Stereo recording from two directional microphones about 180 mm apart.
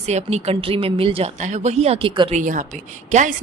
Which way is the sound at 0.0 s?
40° right (ahead or behind).